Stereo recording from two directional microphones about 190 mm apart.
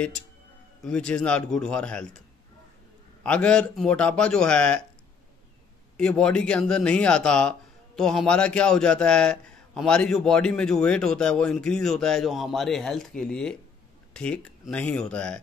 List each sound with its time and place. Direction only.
0.8 s speech: 5° left (ahead or behind)
3.3 s speech: 5° left (ahead or behind)
5.9 s speech: 5° left (ahead or behind)